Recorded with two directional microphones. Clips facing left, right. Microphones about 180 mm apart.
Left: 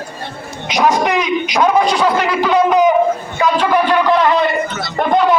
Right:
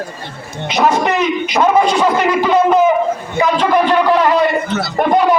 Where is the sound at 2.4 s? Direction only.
5° right (ahead or behind).